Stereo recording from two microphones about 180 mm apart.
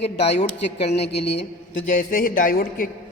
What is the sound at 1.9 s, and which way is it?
A man's voice, 50° left (ahead or behind).